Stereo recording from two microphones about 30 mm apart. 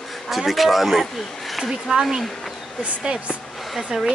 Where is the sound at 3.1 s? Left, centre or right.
Right.